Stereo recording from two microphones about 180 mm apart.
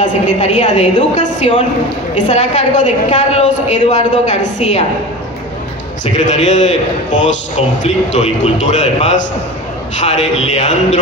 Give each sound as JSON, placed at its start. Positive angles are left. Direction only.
{"t": 0.0, "sound": "a woman's voice", "side_deg": 45}
{"t": 6.1, "sound": "a woman's voice", "side_deg": 40}